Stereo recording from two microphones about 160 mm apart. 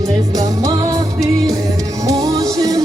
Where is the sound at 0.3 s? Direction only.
20° right (ahead or behind).